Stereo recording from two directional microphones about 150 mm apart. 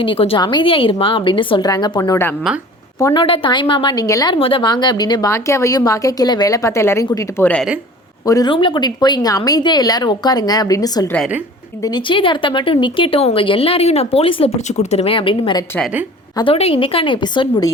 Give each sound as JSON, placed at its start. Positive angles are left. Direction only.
{"t": 0.0, "sound": "speech", "side_deg": 35}
{"t": 3.2, "sound": "speech", "side_deg": 35}
{"t": 4.4, "sound": "a woman's voice", "side_deg": 35}
{"t": 8.3, "sound": "a woman's voice", "side_deg": 25}